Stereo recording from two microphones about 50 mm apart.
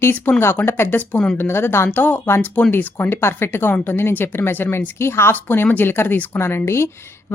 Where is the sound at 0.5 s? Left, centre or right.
Left.